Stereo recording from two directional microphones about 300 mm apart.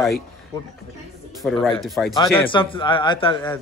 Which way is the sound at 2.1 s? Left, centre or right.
Centre.